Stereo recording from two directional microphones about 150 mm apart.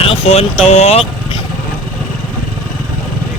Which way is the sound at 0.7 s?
45° left (ahead or behind).